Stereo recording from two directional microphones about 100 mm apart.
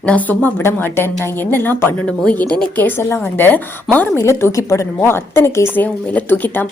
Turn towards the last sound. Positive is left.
turn(degrees=20)  # may be behind; listen again after turning